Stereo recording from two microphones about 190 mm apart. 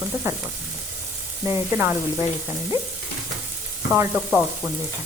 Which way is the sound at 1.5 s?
10° right (ahead or behind).